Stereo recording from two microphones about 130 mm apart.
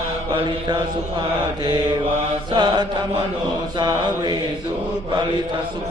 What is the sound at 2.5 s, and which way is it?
Mantra, 35° right (ahead or behind).